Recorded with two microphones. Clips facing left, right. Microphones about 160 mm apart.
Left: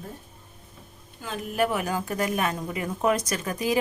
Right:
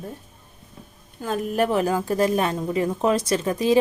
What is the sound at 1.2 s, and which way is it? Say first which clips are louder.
A woman's voice: right 4 dB; 40° right (ahead or behind).